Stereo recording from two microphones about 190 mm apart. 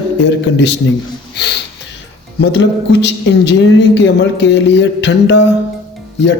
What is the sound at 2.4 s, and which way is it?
A man's voice, 70° left (ahead or behind).